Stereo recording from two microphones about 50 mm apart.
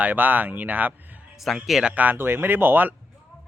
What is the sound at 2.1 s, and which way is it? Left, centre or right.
Speech, right.